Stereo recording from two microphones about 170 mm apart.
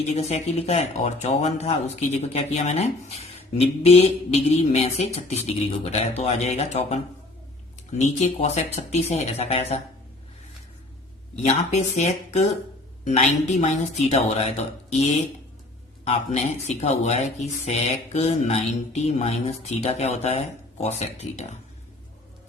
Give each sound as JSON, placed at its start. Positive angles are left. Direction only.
{"t": 0.0, "sound": "speech", "side_deg": 40}
{"t": 11.4, "sound": "speech", "side_deg": 40}
{"t": 16.0, "sound": "speech", "side_deg": 40}